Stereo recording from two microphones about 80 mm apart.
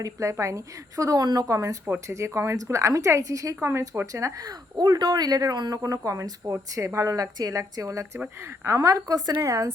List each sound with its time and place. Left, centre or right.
0.0 s a woman's voice: right
3.6 s a woman's voice: right
4.0 s a woman's voice: right
9.4 s a woman's voice: right